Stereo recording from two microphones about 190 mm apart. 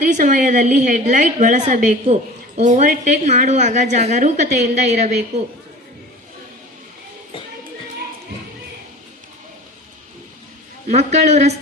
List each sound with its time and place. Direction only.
0.0 s a woman's voice: 45° right (ahead or behind)
10.8 s a woman's voice: 35° right (ahead or behind)